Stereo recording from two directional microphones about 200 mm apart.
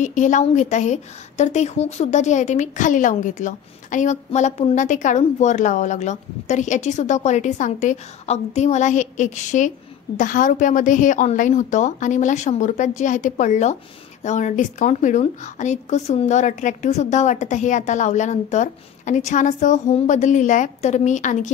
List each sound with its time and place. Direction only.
0.0 s a woman's voice: 40° left (ahead or behind)